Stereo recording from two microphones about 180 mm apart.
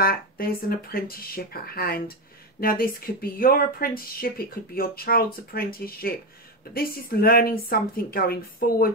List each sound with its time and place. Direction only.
0.0 s speech: 55° left (ahead or behind)